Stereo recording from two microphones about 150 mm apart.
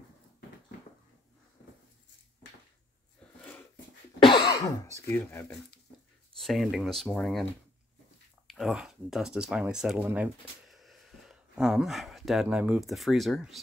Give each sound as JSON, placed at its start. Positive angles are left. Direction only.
{"t": 4.2, "sound": "cough", "side_deg": 35}
{"t": 5.1, "sound": "speech", "side_deg": 10}
{"t": 8.5, "sound": "speech", "side_deg": 0}